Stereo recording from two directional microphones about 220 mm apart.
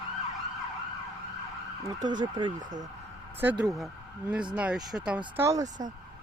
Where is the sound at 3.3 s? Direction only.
10° right (ahead or behind).